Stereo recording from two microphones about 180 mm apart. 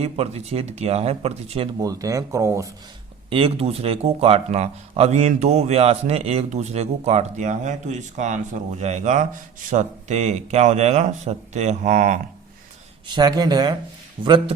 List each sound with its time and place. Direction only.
0.0 s speech: 35° right (ahead or behind)
1.8 s speech: 20° right (ahead or behind)
3.2 s speech: 30° right (ahead or behind)
13.1 s speech: 25° right (ahead or behind)